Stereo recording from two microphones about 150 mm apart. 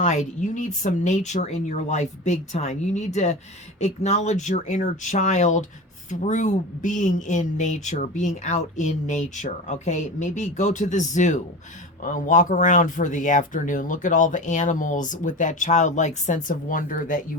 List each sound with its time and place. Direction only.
0.0 s speech: 50° left (ahead or behind)